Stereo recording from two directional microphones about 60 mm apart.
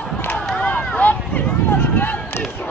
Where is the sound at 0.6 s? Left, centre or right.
Left.